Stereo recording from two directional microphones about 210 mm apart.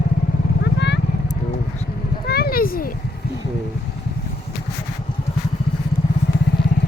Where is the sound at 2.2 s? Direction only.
50° left (ahead or behind).